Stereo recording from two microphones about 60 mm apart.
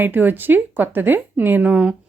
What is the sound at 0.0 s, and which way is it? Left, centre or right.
A woman's voice, right.